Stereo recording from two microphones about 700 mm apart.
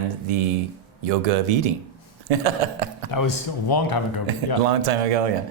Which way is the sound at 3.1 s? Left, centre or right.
Left.